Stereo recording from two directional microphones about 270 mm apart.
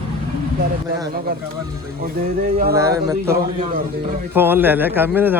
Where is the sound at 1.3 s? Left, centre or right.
Right.